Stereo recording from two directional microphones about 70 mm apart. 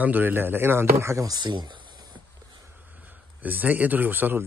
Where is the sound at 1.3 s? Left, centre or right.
Right.